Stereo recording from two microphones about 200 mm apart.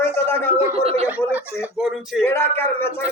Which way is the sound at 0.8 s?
30° right (ahead or behind).